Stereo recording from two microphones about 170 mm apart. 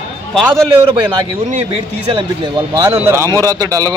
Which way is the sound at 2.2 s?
25° right (ahead or behind).